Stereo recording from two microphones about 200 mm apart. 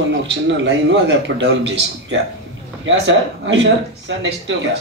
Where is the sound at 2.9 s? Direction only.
70° right (ahead or behind).